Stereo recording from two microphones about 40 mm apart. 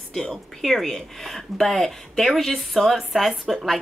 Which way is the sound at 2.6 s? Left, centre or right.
Centre.